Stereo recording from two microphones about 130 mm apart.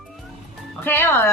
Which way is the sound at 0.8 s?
15° left (ahead or behind).